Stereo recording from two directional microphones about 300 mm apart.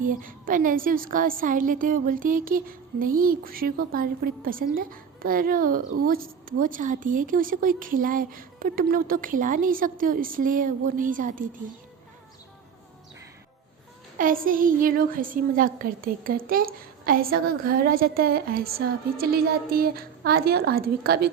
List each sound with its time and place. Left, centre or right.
0.0 s a woman's voice: right
14.2 s a woman's voice: right